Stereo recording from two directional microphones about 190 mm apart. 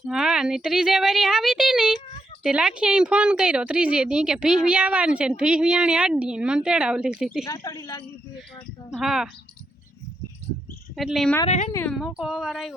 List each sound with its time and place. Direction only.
0.0 s speech: 5° right (ahead or behind)
7.4 s a woman's voice: 20° left (ahead or behind)
8.9 s speech: centre (ahead or behind)
10.9 s speech: centre (ahead or behind)
11.4 s speech: 40° left (ahead or behind)
11.7 s speech: 10° left (ahead or behind)
11.9 s speech: centre (ahead or behind)